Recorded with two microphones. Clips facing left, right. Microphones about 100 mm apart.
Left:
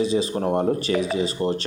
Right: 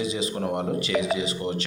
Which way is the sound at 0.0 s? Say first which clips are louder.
Left 5 dB; 35° left (ahead or behind).